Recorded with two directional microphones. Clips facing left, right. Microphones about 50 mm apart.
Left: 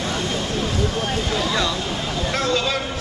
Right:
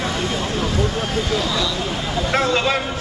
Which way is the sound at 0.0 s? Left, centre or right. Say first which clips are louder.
Right 2 dB; centre.